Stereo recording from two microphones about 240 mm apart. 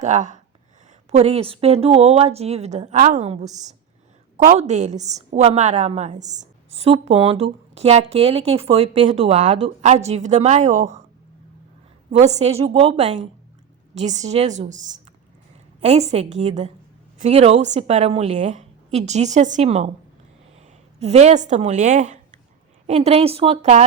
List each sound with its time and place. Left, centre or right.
0.0 s a woman's voice: right
12.1 s a woman's voice: right
15.8 s a woman's voice: right